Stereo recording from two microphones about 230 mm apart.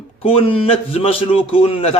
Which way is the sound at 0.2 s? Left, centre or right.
Left.